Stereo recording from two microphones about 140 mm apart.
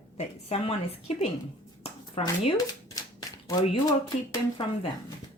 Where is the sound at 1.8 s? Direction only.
45° left (ahead or behind).